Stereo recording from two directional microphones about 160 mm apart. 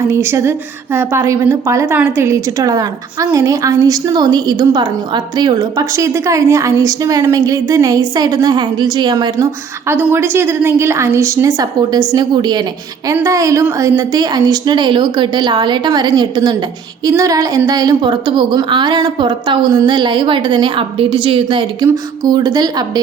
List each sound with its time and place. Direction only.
0.1 s a woman's voice: 15° right (ahead or behind)
9.9 s a woman's voice: 15° right (ahead or behind); by 21.8 s 30° right (ahead or behind)
21.8 s a woman's voice: 20° right (ahead or behind)